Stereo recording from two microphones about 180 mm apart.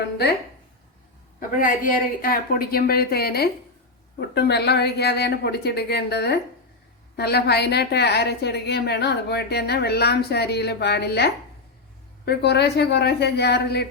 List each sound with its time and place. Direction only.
1.4 s a woman's voice: 50° left (ahead or behind); by 13.8 s 65° left (ahead or behind)